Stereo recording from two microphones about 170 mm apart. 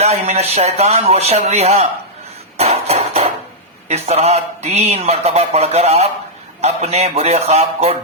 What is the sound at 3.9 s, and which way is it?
A man's voice, 40° right (ahead or behind).